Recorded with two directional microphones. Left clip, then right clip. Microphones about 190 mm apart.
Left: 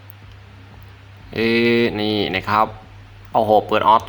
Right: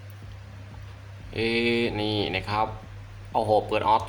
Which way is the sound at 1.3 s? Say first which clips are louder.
Left 8 dB; 20° left (ahead or behind).